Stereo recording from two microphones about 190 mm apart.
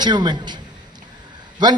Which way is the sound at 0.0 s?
25° right (ahead or behind).